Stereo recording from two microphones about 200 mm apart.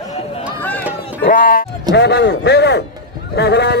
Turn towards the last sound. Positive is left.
turn(degrees=55)  # may be behind; listen again after turning